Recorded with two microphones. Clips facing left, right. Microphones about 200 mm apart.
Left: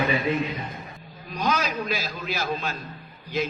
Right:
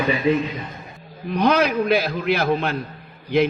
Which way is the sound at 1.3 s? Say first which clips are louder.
Right 8 dB; 60° right (ahead or behind).